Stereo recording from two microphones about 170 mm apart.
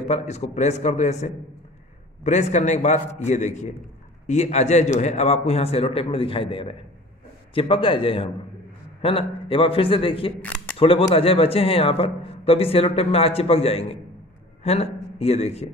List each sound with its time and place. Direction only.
0.1 s a man's voice: 40° left (ahead or behind)